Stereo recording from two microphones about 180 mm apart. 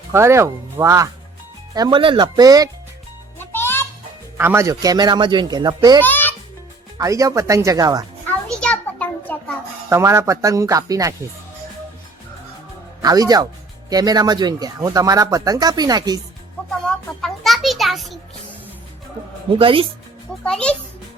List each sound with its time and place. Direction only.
0.1 s speech: 15° right (ahead or behind)
3.3 s music: 10° left (ahead or behind)
4.4 s speech: 15° right (ahead or behind)
6.0 s music: 10° left (ahead or behind)
7.0 s speech: 20° right (ahead or behind)
8.4 s a sound: 5° left (ahead or behind)
9.9 s speech: 15° right (ahead or behind)
13.0 s speech: 20° right (ahead or behind)
17.2 s a sound: centre (ahead or behind)
19.5 s speech: 30° right (ahead or behind)
20.4 s music: 5° left (ahead or behind)